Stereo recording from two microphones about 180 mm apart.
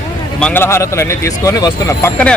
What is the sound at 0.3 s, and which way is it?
Speech, 10° left (ahead or behind).